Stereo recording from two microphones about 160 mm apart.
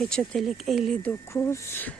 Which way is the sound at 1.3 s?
15° left (ahead or behind).